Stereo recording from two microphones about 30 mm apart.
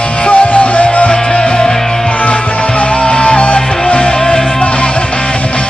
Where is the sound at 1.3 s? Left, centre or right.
Left.